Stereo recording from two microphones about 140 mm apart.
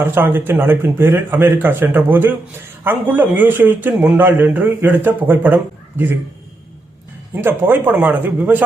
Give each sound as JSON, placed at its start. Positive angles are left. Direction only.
{"t": 0.0, "sound": "a man's voice", "side_deg": -15}
{"t": 7.4, "sound": "a man's voice", "side_deg": -15}